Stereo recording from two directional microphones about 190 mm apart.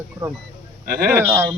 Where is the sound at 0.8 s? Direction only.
50° right (ahead or behind).